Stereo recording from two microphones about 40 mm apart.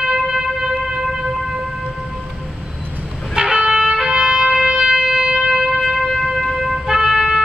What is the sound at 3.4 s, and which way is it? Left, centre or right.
Trumpet, centre.